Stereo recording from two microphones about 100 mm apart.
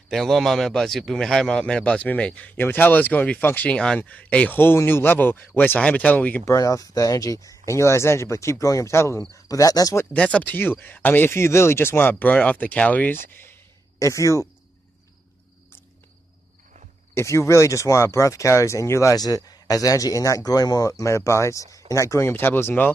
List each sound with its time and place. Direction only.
0.1 s a man's voice: centre (ahead or behind)
6.4 s speech: 35° left (ahead or behind)
10.1 s speech: 10° left (ahead or behind)
13.9 s speech: 30° left (ahead or behind)
17.1 s speech: 25° left (ahead or behind)